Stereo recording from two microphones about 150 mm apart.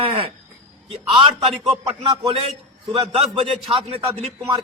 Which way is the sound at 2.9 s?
40° right (ahead or behind).